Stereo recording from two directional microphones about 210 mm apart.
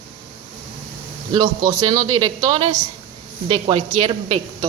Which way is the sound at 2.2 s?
20° right (ahead or behind).